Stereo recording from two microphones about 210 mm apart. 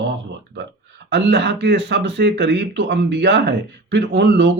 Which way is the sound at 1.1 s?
55° right (ahead or behind).